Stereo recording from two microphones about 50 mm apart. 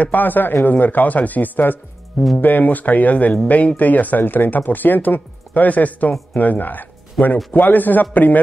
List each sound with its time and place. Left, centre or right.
0.0 s speech: left